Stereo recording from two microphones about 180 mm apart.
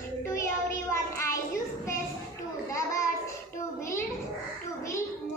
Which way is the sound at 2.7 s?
15° left (ahead or behind).